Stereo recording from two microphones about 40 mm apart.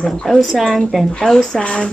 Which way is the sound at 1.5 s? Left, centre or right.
Left.